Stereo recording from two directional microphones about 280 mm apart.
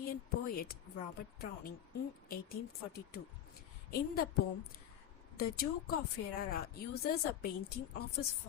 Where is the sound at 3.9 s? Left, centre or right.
Left.